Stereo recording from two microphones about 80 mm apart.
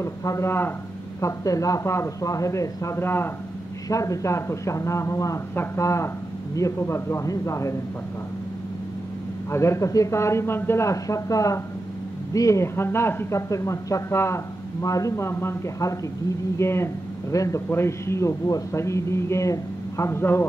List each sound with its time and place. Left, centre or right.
0.0 s a man's voice: left
0.5 s a man's voice: left
1.2 s speech: left
3.0 s a man's voice: left
3.9 s speech: left
9.5 s speech: left